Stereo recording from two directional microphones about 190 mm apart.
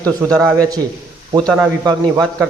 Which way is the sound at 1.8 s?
20° right (ahead or behind).